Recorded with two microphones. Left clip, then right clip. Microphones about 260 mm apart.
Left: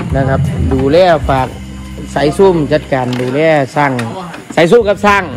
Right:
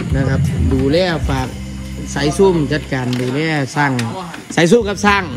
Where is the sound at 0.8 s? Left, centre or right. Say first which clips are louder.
Left 9 dB; centre.